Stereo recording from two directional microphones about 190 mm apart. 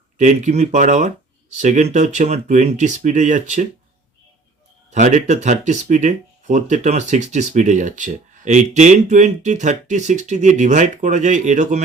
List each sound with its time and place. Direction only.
0.2 s speech: 40° right (ahead or behind)
4.9 s speech: 40° right (ahead or behind)